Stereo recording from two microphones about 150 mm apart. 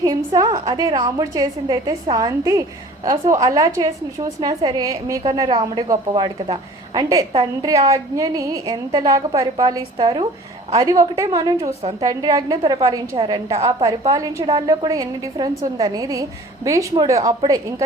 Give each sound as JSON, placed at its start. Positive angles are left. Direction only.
{"t": 0.0, "sound": "a woman's voice", "side_deg": -25}
{"t": 11.6, "sound": "a woman's voice", "side_deg": -45}
{"t": 11.9, "sound": "a woman's voice", "side_deg": -25}